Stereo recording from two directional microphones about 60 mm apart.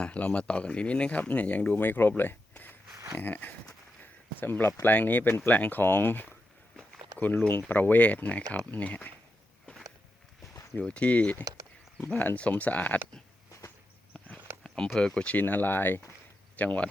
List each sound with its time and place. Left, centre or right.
0.0 s speech: left
10.8 s speech: centre
14.6 s speech: centre
15.4 s speech: left